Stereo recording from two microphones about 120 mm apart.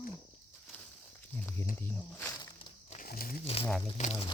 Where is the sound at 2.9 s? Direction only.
55° left (ahead or behind).